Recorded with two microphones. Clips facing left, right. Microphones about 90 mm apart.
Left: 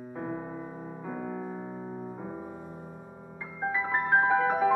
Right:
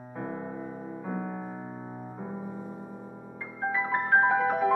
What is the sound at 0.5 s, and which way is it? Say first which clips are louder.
Music: right 2 dB; centre (ahead or behind).